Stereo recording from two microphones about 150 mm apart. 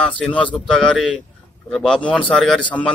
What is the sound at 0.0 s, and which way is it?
A man's voice, 5° left (ahead or behind).